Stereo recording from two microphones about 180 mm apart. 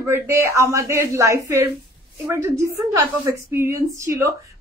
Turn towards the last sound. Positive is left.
turn(degrees=-15)  # may be behind; listen again after turning